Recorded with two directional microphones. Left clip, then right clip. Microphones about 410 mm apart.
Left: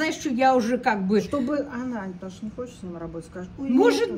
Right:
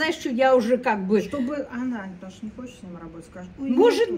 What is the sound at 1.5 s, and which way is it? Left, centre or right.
Speech, centre.